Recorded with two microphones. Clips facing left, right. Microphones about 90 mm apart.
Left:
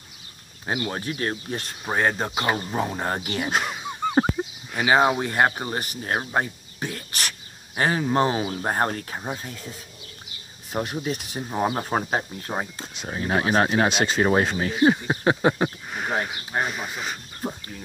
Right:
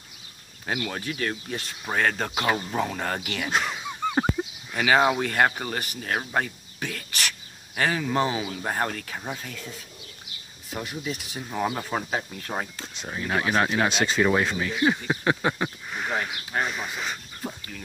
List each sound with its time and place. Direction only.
0.7 s speech: 25° left (ahead or behind)
1.9 s speech: 20° left (ahead or behind)
3.4 s speech: 10° left (ahead or behind)
4.1 s speech: 25° left (ahead or behind)
9.2 s speech: 25° left (ahead or behind)
10.7 s speech: 45° left (ahead or behind)
11.4 s speech: 30° left (ahead or behind)
13.8 s speech: 15° left (ahead or behind)
14.6 s speech: 40° left (ahead or behind)
14.9 s a sound: 25° left (ahead or behind)
16.5 s speech: 10° left (ahead or behind)
17.4 s speech: 20° left (ahead or behind)